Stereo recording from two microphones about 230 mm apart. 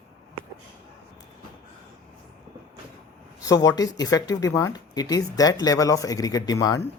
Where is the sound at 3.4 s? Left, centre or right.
Centre.